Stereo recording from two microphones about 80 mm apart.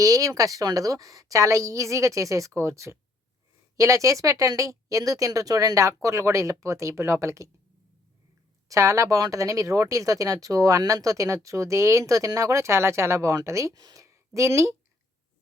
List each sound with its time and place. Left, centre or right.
0.0 s speech: right
8.7 s speech: right